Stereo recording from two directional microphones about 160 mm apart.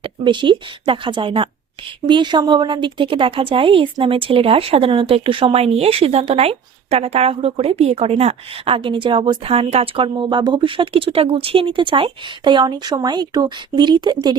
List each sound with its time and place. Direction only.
0.0 s a woman's voice: 30° right (ahead or behind)